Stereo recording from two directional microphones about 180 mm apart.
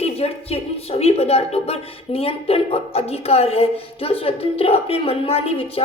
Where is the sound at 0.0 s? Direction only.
35° left (ahead or behind).